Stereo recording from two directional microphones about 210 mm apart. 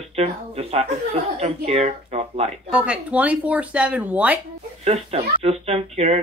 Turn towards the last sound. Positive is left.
turn(degrees=-30)  # may be behind; listen again after turning